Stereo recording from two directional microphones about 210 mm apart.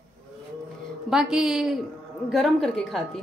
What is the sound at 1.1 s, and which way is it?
A woman's voice, 5° right (ahead or behind).